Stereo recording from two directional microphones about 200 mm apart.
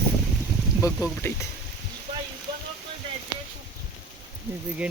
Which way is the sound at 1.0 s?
15° left (ahead or behind).